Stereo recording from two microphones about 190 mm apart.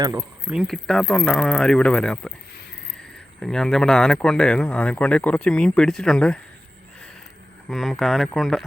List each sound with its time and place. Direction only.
0.0 s speech: 15° right (ahead or behind)
0.4 s speech: 5° right (ahead or behind)
7.7 s speech: centre (ahead or behind)